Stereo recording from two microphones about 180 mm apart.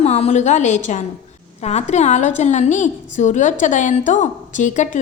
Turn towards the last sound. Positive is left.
turn(degrees=45)  # may be behind; listen again after turning